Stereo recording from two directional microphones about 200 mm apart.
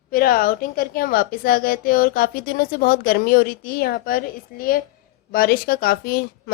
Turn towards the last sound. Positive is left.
turn(degrees=50)  # may be behind; listen again after turning